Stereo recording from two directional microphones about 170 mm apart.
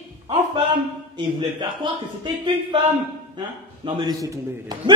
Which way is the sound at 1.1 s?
25° right (ahead or behind).